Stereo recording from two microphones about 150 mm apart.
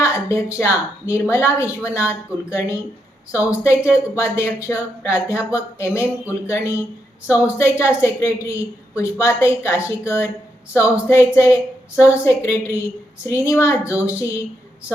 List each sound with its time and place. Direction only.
0.0 s a woman's voice: 20° left (ahead or behind)